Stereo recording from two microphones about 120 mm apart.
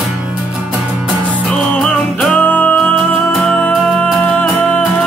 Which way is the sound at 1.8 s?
5° left (ahead or behind).